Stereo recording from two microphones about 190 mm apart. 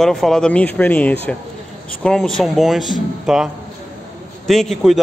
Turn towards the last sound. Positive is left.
turn(degrees=0)  # may be behind; listen again after turning